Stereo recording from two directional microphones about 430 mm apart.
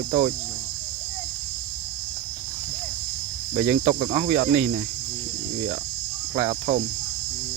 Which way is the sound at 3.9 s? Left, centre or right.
Centre.